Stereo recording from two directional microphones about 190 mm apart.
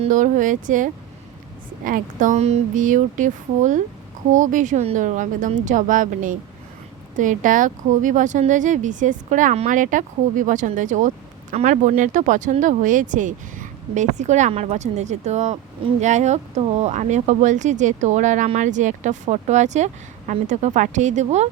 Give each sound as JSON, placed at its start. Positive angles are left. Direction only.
{"t": 0.0, "sound": "speech", "side_deg": -40}